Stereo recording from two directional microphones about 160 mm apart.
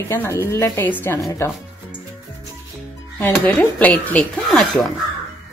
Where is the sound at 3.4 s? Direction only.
10° left (ahead or behind).